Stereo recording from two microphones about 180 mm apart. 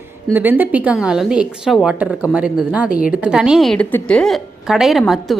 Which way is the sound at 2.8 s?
55° left (ahead or behind).